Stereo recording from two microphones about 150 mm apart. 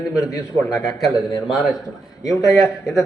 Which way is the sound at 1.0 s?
Centre (ahead or behind).